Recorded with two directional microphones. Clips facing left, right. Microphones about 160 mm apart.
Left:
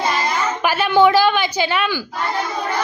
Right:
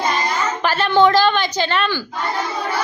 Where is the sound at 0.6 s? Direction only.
10° left (ahead or behind).